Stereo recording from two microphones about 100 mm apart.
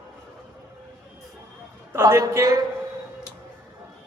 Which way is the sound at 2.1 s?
30° right (ahead or behind).